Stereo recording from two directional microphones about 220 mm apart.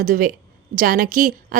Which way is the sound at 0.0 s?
40° right (ahead or behind).